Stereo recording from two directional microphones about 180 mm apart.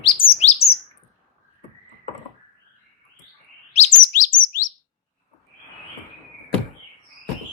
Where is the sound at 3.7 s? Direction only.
40° left (ahead or behind).